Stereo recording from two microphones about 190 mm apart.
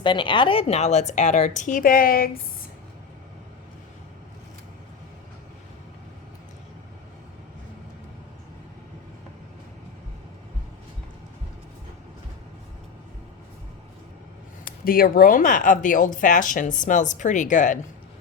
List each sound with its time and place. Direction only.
0.0 s a woman's voice: 25° left (ahead or behind); by 2.3 s 50° left (ahead or behind)
14.8 s speech: 50° left (ahead or behind)